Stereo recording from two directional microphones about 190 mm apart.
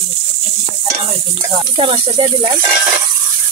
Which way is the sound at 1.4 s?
25° right (ahead or behind).